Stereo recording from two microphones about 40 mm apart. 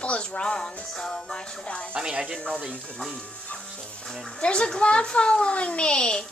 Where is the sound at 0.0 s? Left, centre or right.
Left.